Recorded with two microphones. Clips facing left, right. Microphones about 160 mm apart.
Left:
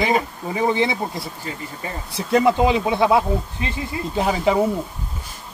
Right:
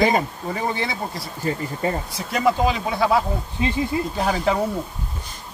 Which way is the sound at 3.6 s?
20° right (ahead or behind).